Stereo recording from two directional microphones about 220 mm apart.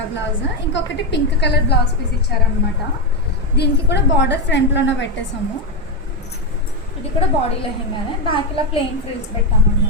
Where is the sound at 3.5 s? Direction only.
50° left (ahead or behind).